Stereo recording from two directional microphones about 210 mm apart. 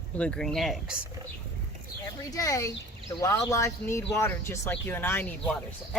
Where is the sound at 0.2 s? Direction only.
5° left (ahead or behind).